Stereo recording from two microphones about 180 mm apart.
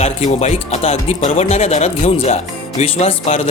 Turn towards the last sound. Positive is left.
turn(degrees=35)  # may be behind; listen again after turning